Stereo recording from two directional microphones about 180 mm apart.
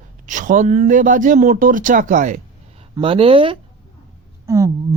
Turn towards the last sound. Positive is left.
turn(degrees=-15)  # may be behind; listen again after turning